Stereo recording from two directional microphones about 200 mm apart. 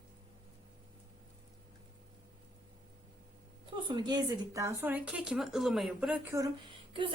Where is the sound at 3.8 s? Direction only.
25° right (ahead or behind).